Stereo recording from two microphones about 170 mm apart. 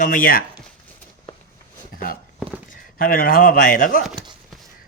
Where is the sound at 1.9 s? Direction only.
55° left (ahead or behind).